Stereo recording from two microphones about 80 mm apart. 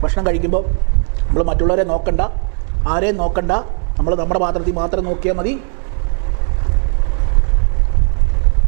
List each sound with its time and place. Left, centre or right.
0.0 s a man's voice: centre